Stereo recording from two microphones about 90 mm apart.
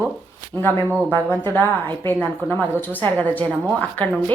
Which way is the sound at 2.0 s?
20° left (ahead or behind).